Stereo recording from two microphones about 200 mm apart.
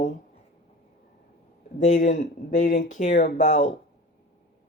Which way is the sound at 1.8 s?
40° left (ahead or behind).